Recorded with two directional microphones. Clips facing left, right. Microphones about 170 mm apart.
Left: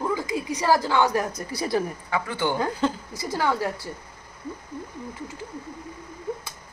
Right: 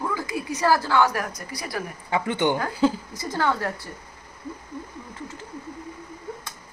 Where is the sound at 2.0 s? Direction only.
25° right (ahead or behind).